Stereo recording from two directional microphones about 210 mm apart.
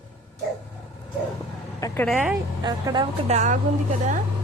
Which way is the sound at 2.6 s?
20° right (ahead or behind).